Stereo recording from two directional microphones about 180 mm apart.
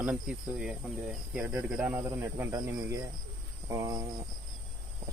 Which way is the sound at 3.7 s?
20° right (ahead or behind).